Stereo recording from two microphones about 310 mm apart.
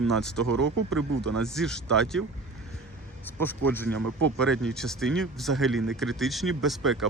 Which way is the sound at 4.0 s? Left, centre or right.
Right.